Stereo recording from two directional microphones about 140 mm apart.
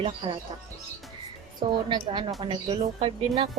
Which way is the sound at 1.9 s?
35° right (ahead or behind).